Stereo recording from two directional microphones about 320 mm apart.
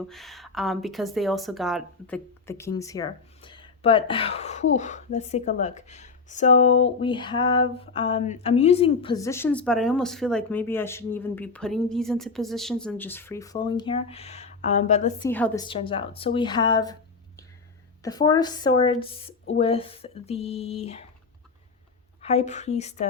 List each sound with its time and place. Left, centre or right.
0.1 s speech: centre; by 15.3 s left
15.3 s speech: centre
22.2 s speech: centre